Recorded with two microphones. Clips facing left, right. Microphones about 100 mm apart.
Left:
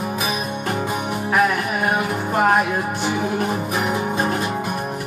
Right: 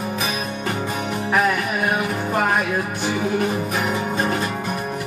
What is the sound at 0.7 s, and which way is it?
Music, 15° left (ahead or behind).